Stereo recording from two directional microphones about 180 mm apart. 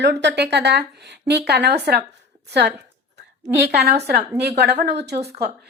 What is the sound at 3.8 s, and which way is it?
Speech, 60° right (ahead or behind).